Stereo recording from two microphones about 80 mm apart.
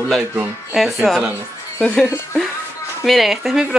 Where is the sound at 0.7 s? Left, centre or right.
Centre.